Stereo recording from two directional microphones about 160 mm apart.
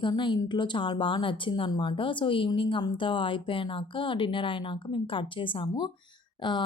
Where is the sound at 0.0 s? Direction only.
30° left (ahead or behind).